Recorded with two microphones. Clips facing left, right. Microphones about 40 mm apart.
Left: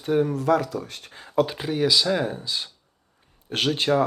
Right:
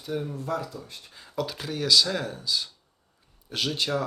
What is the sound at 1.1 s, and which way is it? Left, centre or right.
Speech, left.